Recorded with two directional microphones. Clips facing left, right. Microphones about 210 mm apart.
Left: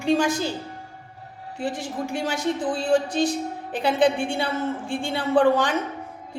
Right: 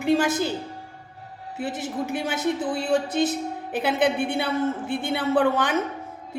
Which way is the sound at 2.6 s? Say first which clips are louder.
Left 1 dB; 5° right (ahead or behind).